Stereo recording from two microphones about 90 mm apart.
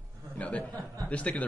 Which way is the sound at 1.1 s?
15° left (ahead or behind).